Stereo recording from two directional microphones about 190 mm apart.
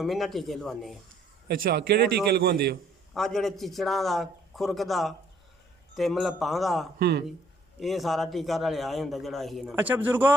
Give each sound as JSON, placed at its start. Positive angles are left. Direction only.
{"t": 0.0, "sound": "a man's voice", "side_deg": 0}
{"t": 1.5, "sound": "a man's voice", "side_deg": -50}
{"t": 3.2, "sound": "a man's voice", "side_deg": 0}
{"t": 7.0, "sound": "a man's voice", "side_deg": -60}
{"t": 7.8, "sound": "a man's voice", "side_deg": 0}